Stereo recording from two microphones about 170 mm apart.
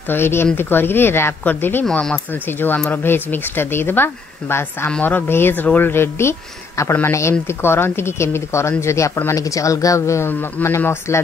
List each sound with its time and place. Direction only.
0.1 s speech: 15° left (ahead or behind)